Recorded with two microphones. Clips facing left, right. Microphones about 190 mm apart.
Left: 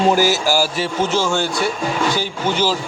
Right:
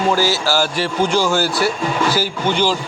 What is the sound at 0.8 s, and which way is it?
A man's voice, centre (ahead or behind).